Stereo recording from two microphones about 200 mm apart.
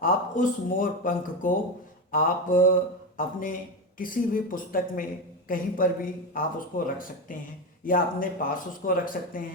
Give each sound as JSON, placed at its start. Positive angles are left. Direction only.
{"t": 0.0, "sound": "a man's voice", "side_deg": 45}